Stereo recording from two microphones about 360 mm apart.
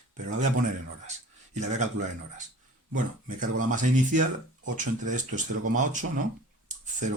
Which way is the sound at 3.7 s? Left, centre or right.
Right.